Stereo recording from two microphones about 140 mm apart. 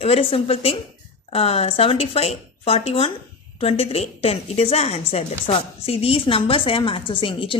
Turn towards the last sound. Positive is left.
turn(degrees=35)  # may be behind; listen again after turning